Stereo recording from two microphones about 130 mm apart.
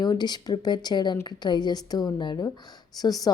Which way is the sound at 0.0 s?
35° left (ahead or behind).